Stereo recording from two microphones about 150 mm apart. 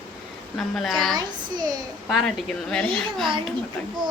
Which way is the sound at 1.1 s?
25° right (ahead or behind).